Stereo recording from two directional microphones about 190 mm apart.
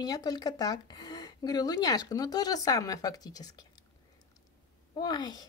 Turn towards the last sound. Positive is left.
turn(degrees=20)  # may be behind; listen again after turning